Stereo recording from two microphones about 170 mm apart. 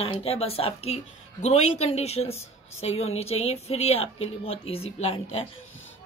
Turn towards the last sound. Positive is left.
turn(degrees=35)  # may be behind; listen again after turning